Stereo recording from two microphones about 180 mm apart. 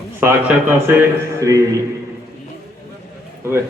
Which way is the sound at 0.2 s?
10° right (ahead or behind).